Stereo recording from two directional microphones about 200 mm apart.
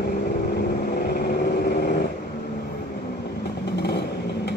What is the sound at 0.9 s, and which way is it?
Vehicle, 50° left (ahead or behind).